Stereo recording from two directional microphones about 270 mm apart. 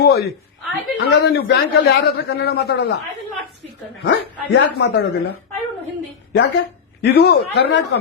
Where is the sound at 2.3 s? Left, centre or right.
Left.